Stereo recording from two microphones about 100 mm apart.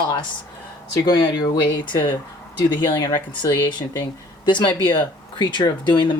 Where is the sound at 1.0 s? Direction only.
45° left (ahead or behind).